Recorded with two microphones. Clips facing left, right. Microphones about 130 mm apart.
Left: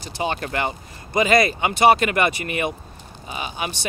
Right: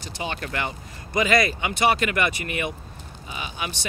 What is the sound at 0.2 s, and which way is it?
Speech, 40° left (ahead or behind).